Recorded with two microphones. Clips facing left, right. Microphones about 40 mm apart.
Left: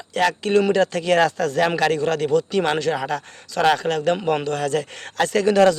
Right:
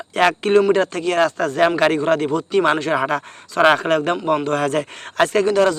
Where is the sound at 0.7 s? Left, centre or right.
Centre.